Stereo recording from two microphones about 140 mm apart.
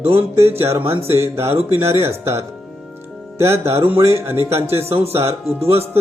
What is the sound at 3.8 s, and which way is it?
Music, 20° right (ahead or behind).